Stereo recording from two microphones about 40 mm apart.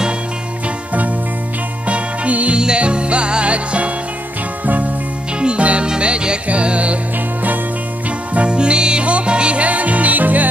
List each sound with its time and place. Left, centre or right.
1.9 s music: right
2.5 s music: right
5.4 s music: right
8.4 s music: right